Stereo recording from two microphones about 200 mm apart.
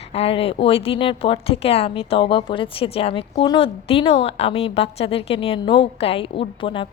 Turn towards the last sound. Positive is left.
turn(degrees=25)  # may be behind; listen again after turning